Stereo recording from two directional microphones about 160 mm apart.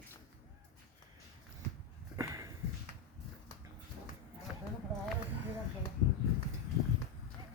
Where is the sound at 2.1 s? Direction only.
20° right (ahead or behind).